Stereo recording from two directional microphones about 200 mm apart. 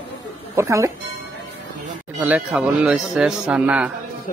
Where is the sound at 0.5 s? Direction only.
15° right (ahead or behind).